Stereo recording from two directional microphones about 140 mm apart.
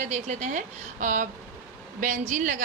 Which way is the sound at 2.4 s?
65° right (ahead or behind).